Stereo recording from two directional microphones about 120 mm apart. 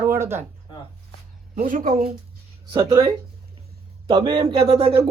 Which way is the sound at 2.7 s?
40° right (ahead or behind).